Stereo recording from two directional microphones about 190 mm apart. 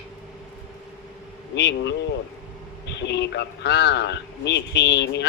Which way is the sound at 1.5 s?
65° left (ahead or behind).